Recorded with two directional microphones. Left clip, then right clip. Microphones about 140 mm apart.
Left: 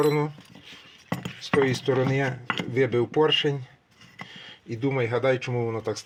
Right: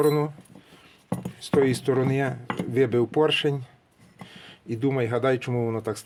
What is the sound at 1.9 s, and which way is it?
Speech, 30° right (ahead or behind).